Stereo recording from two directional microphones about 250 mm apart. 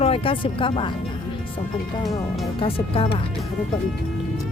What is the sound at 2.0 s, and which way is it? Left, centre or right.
Speech, centre.